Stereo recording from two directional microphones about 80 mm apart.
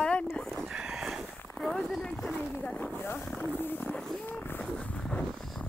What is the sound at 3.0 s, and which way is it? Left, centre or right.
Speech, left.